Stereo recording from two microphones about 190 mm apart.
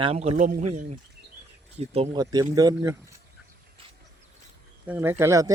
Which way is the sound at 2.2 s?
20° right (ahead or behind).